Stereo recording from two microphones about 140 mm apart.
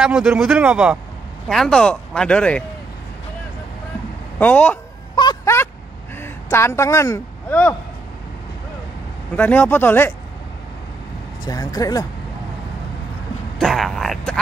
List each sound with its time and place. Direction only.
0.0 s a man's voice: 5° right (ahead or behind)
1.5 s speech: 5° left (ahead or behind)
4.4 s speech: 10° left (ahead or behind)
5.1 s a sound: 30° left (ahead or behind)
6.2 s a man's voice: 20° left (ahead or behind)
9.3 s speech: 15° left (ahead or behind)
11.4 s speech: 25° left (ahead or behind)
13.6 s speech: centre (ahead or behind)